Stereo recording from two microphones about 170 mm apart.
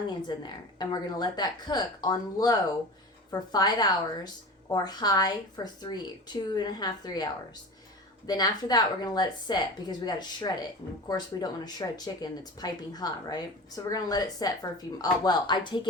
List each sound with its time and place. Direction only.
0.1 s speech: 25° left (ahead or behind)
8.3 s speech: 25° left (ahead or behind)